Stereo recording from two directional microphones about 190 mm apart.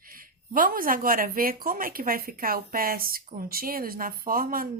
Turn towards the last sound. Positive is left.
turn(degrees=-50)  # may be behind; listen again after turning